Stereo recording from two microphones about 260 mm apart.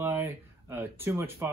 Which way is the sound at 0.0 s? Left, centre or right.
Centre.